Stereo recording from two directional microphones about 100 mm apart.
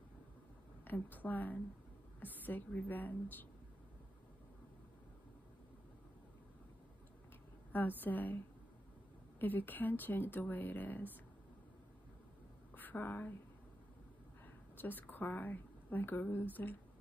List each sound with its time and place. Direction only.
0.8 s a woman's voice: 20° left (ahead or behind)
7.7 s a woman's voice: 20° left (ahead or behind)
9.4 s speech: 20° left (ahead or behind)
12.7 s a woman's voice: 20° left (ahead or behind)
14.4 s a woman's voice: 20° left (ahead or behind)